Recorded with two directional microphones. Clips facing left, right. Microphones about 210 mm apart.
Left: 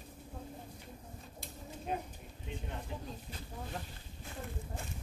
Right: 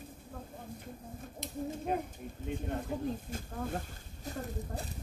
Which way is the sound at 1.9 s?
55° right (ahead or behind).